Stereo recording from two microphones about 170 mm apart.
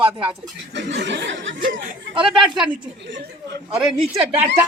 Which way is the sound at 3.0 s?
90° right.